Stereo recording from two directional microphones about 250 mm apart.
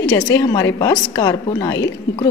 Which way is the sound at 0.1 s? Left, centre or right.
Centre.